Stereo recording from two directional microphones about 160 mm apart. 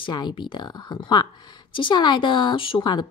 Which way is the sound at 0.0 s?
30° left (ahead or behind).